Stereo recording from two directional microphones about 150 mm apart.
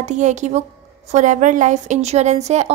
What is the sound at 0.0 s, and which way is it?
A woman's voice, 55° right (ahead or behind).